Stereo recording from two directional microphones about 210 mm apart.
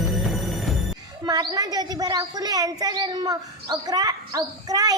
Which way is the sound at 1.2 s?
20° right (ahead or behind).